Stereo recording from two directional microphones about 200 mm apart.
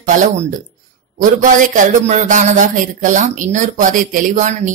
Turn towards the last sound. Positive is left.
turn(degrees=-35)  # may be behind; listen again after turning